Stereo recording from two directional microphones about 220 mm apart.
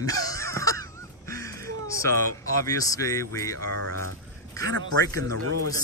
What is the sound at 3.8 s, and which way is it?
Speech, 75° right (ahead or behind).